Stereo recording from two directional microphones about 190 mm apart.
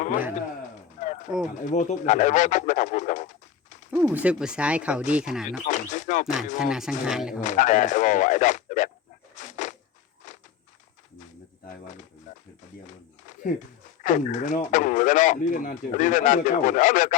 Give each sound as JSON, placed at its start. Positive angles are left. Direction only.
{"t": 0.9, "sound": "a sound", "side_deg": 40}
{"t": 1.7, "sound": "speech", "side_deg": 40}
{"t": 3.9, "sound": "speech", "side_deg": -10}
{"t": 5.1, "sound": "music", "side_deg": -5}
{"t": 5.6, "sound": "music", "side_deg": 40}
{"t": 6.2, "sound": "music", "side_deg": -5}
{"t": 7.4, "sound": "speech", "side_deg": 40}
{"t": 9.3, "sound": "a sound", "side_deg": 40}
{"t": 10.2, "sound": "walk", "side_deg": 40}
{"t": 12.3, "sound": "a sound", "side_deg": 45}
{"t": 14.0, "sound": "speech", "side_deg": 40}